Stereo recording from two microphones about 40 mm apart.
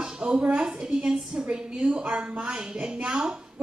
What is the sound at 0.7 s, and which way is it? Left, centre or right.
A woman's voice, centre.